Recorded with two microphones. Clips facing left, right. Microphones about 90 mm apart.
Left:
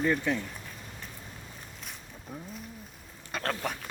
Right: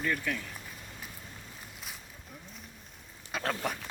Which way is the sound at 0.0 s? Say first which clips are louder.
Left 5 dB; 20° left (ahead or behind).